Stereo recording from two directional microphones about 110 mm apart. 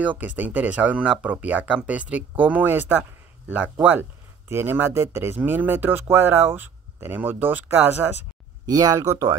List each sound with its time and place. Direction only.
0.0 s speech: 15° right (ahead or behind)
8.6 s speech: 35° right (ahead or behind)